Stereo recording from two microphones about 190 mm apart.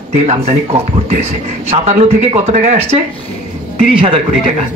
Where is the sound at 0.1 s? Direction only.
35° right (ahead or behind).